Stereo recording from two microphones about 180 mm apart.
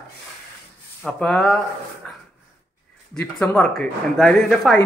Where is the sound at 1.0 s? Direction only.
5° left (ahead or behind).